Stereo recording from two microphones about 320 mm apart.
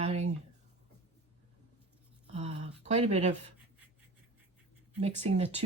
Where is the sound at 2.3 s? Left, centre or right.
Centre.